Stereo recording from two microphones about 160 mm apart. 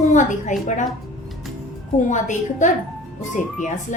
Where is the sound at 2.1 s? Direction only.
50° left (ahead or behind).